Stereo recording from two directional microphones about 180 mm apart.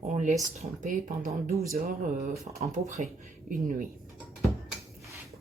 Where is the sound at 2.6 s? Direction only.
40° right (ahead or behind).